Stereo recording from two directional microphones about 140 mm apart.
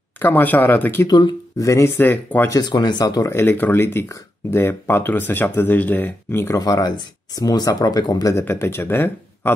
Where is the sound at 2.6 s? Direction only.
30° left (ahead or behind).